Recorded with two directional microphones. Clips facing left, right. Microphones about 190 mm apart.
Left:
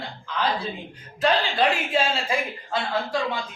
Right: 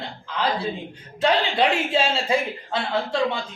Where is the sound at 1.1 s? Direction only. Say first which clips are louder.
Right 1 dB; 25° right (ahead or behind).